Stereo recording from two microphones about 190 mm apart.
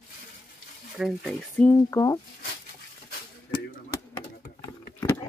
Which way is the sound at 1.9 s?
15° left (ahead or behind).